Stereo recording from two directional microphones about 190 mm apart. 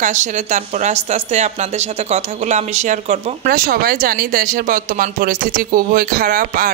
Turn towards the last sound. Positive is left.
turn(degrees=-50)  # may be behind; listen again after turning